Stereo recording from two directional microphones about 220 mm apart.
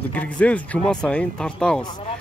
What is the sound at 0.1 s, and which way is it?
Speech, 5° left (ahead or behind).